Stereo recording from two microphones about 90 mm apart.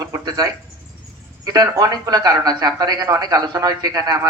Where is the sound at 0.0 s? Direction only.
40° right (ahead or behind).